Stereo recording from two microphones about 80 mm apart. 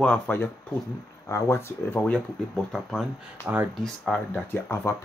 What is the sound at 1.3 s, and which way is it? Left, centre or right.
Speech, left.